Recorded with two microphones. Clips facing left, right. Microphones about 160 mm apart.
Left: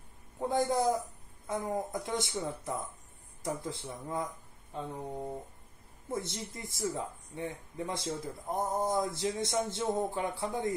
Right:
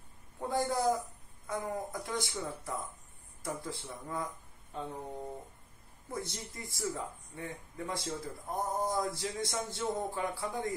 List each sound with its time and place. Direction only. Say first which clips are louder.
0.4 s a man's voice: left 3 dB; 20° left (ahead or behind)
6.0 s speech: left 4 dB; 25° left (ahead or behind)